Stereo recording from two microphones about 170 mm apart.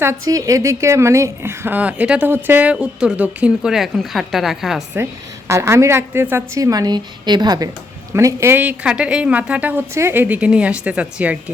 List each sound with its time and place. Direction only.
0.0 s a woman's voice: 20° right (ahead or behind); by 4.8 s centre (ahead or behind)
5.5 s a woman's voice: 15° right (ahead or behind)